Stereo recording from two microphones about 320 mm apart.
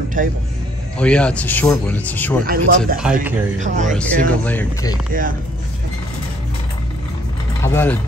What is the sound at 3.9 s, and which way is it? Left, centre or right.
Speech, centre.